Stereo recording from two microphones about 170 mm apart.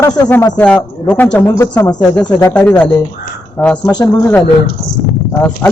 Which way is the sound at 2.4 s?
10° left (ahead or behind).